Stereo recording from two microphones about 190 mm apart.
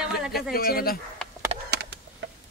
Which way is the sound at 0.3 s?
55° left (ahead or behind).